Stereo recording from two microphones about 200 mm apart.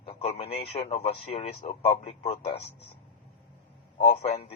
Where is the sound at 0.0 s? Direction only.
30° left (ahead or behind).